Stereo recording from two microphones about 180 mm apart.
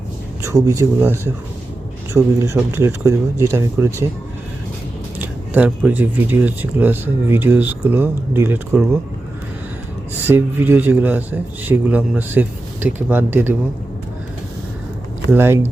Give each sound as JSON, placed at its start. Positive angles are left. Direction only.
{"t": 0.4, "sound": "speech", "side_deg": -15}
{"t": 5.2, "sound": "speech", "side_deg": -10}
{"t": 10.2, "sound": "speech", "side_deg": -10}
{"t": 15.3, "sound": "speech", "side_deg": -15}